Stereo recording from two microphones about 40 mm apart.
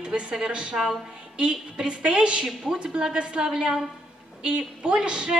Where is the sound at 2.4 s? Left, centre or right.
Centre.